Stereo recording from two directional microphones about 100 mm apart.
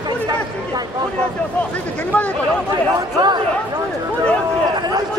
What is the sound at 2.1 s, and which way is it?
Speech, 15° left (ahead or behind).